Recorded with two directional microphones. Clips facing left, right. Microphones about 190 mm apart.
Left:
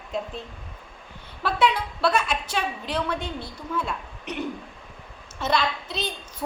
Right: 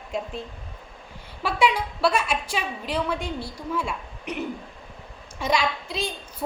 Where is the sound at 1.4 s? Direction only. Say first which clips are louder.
Even; 10° right (ahead or behind).